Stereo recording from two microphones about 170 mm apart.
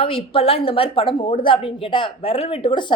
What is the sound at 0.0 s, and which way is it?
A woman's voice, 30° left (ahead or behind).